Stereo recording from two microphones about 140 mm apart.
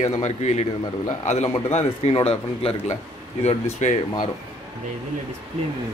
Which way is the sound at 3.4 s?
55° left (ahead or behind).